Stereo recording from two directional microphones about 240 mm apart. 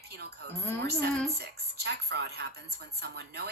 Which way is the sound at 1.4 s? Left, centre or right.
Right.